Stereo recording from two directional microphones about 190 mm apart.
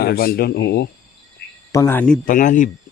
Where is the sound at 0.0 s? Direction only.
55° left (ahead or behind).